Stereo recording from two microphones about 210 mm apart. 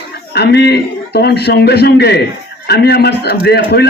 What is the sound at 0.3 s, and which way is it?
A man's voice, 50° left (ahead or behind).